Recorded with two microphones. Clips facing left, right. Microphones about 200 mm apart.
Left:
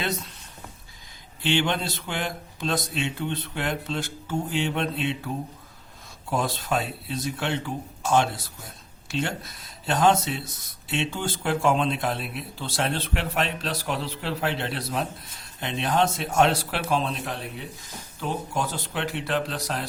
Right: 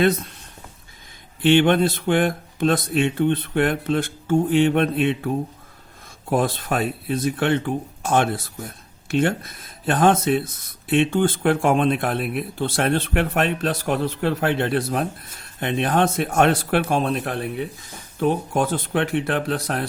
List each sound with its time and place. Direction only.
0.0 s speech: 50° right (ahead or behind)
1.4 s speech: 55° right (ahead or behind)
6.3 s speech: 55° right (ahead or behind)